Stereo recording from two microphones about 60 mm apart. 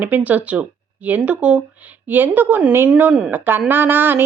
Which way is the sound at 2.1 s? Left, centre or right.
Right.